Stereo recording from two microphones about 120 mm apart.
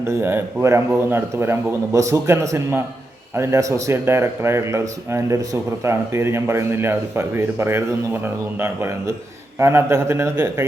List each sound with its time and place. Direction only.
0.0 s speech: 20° right (ahead or behind)